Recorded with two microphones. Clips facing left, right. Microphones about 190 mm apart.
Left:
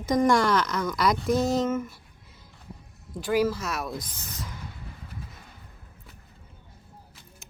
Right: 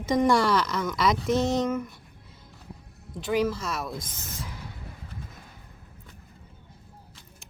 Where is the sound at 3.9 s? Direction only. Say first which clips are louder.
Left 1 dB; 25° right (ahead or behind).